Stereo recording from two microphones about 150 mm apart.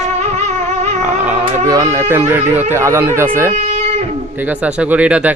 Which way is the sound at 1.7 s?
20° right (ahead or behind).